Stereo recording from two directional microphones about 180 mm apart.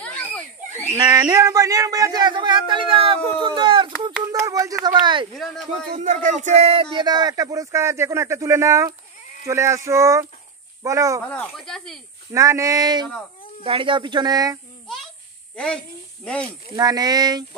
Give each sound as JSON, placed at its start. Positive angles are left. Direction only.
{"t": 0.0, "sound": "a sound", "side_deg": 5}
{"t": 0.9, "sound": "speech", "side_deg": -20}
{"t": 5.3, "sound": "speech", "side_deg": 0}
{"t": 5.7, "sound": "speech", "side_deg": -40}
{"t": 11.2, "sound": "speech", "side_deg": 5}
{"t": 12.3, "sound": "speech", "side_deg": -15}
{"t": 15.5, "sound": "speech", "side_deg": 5}
{"t": 16.7, "sound": "speech", "side_deg": -20}